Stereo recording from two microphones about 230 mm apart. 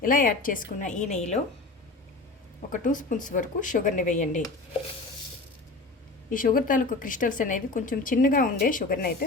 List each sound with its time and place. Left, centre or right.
0.0 s speech: left
2.7 s speech: left
6.3 s speech: left